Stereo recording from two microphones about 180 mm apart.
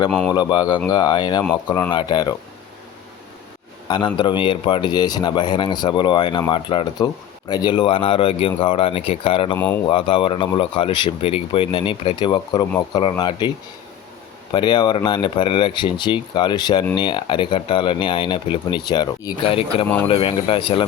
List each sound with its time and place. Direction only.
0.1 s speech: 5° left (ahead or behind)
0.3 s speech: 25° left (ahead or behind)
3.8 s speech: 25° left (ahead or behind)
14.5 s speech: 25° left (ahead or behind)